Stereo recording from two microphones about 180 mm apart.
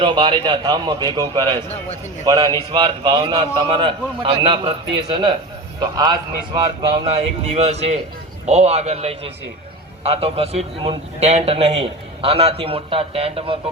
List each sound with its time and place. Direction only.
0.0 s a man's voice: 30° right (ahead or behind)